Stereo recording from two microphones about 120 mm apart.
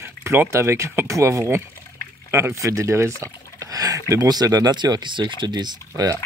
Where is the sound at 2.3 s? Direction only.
20° right (ahead or behind).